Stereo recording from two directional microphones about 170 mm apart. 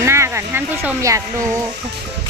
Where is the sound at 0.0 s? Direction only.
15° right (ahead or behind).